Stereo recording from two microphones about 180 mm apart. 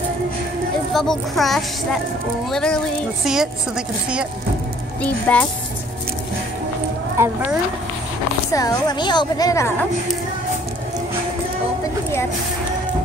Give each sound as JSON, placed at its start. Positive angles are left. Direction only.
{"t": 0.9, "sound": "a woman's voice", "side_deg": 0}
{"t": 5.0, "sound": "speech", "side_deg": 5}
{"t": 7.2, "sound": "speech", "side_deg": -15}
{"t": 8.5, "sound": "a woman's voice", "side_deg": 20}